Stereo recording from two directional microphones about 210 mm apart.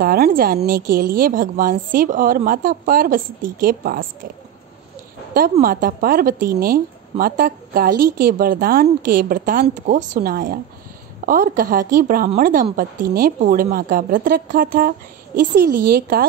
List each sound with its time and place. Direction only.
0.0 s a woman's voice: 45° right (ahead or behind)
5.3 s a woman's voice: 45° right (ahead or behind)